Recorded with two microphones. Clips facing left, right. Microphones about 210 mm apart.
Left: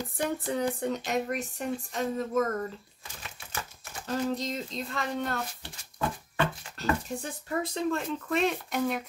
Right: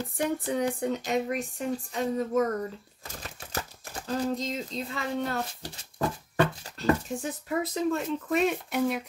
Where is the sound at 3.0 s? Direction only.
40° right (ahead or behind).